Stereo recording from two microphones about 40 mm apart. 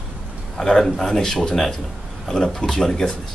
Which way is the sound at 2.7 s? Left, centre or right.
Centre.